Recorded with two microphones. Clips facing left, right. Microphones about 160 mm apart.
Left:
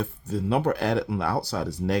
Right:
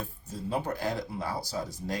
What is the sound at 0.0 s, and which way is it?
Speech, 75° left (ahead or behind).